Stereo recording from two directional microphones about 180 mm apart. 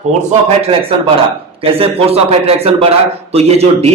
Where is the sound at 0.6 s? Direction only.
30° right (ahead or behind).